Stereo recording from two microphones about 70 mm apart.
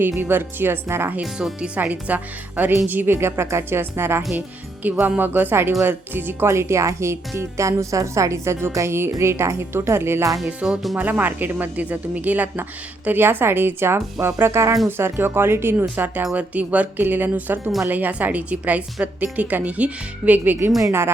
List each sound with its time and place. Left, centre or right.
0.2 s speech: right
1.2 s speech: centre; by 3.2 s right
3.2 s speech: right
4.4 s speech: right
10.6 s speech: centre
10.9 s speech: right
16.3 s speech: right